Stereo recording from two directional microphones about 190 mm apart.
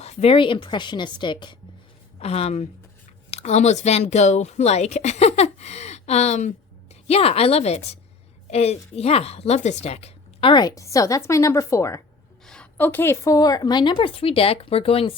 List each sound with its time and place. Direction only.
0.0 s a woman's voice: 35° left (ahead or behind)